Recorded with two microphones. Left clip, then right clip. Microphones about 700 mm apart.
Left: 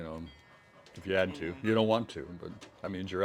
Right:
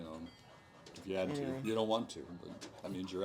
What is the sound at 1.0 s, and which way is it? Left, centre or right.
Speech, left.